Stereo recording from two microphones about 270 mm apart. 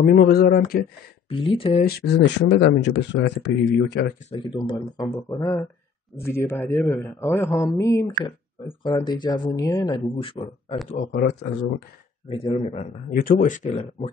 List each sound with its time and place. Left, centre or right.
0.0 s speech: left
1.3 s speech: centre; by 4.1 s left
4.3 s speech: centre
10.9 s speech: left
12.3 s speech: left